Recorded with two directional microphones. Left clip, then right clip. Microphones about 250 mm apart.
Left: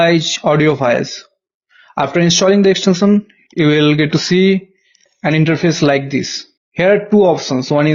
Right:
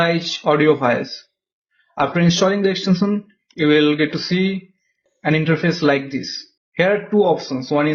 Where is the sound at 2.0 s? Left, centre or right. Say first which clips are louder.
Left 4 dB; left.